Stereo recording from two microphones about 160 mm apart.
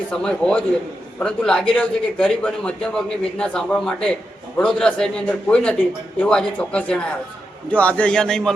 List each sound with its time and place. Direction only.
0.1 s a man's voice: 5° left (ahead or behind)